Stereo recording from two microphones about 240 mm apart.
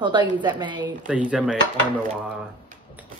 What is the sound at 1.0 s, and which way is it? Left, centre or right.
Speech, centre.